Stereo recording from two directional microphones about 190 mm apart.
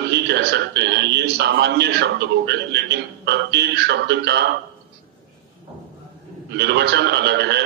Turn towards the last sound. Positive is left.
turn(degrees=-60)  # may be behind; listen again after turning